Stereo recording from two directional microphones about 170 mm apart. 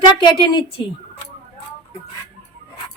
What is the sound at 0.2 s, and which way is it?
Speech, 30° left (ahead or behind).